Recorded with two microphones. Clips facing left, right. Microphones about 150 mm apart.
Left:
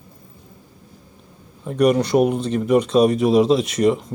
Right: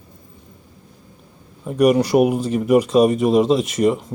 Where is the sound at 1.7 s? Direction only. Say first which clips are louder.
Right 2 dB; 5° right (ahead or behind).